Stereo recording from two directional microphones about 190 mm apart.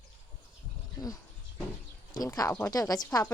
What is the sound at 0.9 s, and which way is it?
Speech, 20° left (ahead or behind).